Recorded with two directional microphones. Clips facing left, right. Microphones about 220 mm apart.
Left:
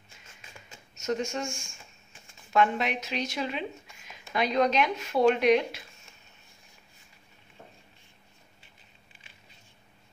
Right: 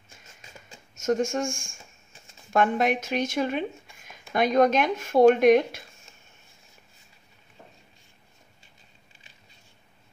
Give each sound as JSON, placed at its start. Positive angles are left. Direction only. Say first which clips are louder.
{"t": 0.9, "sound": "speech", "louder": "right 6 dB", "side_deg": -50}